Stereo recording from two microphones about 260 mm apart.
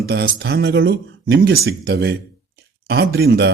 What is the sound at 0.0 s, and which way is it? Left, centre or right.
Speech, right.